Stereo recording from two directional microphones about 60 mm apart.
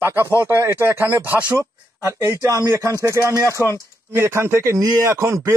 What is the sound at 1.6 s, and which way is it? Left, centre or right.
Speech, right.